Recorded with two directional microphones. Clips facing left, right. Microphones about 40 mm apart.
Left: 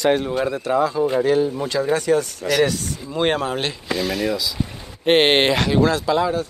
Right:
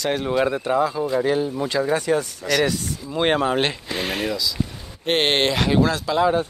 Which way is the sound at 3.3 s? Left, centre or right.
Right.